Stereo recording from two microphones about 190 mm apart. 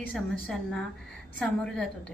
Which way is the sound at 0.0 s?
5° left (ahead or behind).